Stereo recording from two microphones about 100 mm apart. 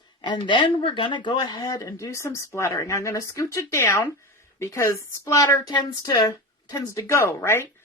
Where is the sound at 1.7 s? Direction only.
35° left (ahead or behind).